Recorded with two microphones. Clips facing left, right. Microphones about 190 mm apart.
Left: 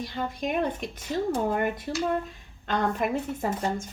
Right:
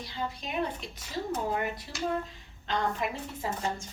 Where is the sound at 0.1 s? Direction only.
50° left (ahead or behind).